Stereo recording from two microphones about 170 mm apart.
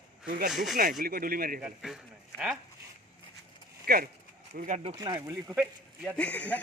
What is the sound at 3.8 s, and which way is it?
Speech, 60° right (ahead or behind).